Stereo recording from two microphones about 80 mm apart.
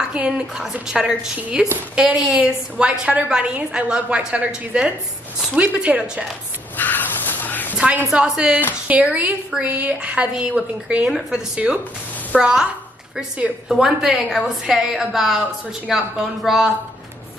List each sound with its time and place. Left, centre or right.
0.1 s a woman's voice: centre
6.8 s a sound: left
7.7 s a woman's voice: centre
13.7 s a woman's voice: centre